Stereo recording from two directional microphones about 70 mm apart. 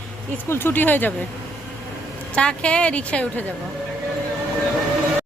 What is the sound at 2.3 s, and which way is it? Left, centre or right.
A woman's voice, centre.